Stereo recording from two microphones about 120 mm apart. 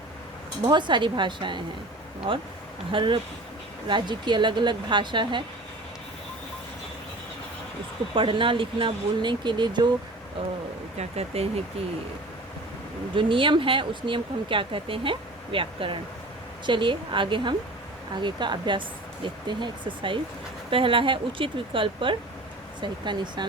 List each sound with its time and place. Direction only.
0.6 s speech: 40° right (ahead or behind)
8.1 s speech: 45° right (ahead or behind)
10.9 s speech: 60° right (ahead or behind)
13.1 s speech: 45° right (ahead or behind)